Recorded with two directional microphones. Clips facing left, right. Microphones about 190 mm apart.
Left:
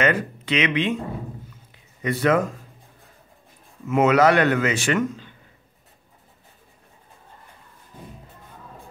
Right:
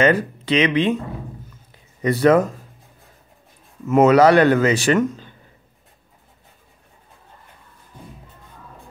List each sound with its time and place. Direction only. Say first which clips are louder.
0.0 s a man's voice: right 5 dB; 35° right (ahead or behind)
2.0 s speech: right 5 dB; 35° right (ahead or behind)
3.9 s a man's voice: right 5 dB; 40° right (ahead or behind)